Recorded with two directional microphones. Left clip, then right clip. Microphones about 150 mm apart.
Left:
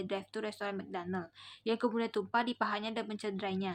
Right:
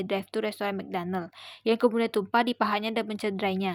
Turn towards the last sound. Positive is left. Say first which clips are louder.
# right 9 dB
turn(degrees=-50)  # may be behind; listen again after turning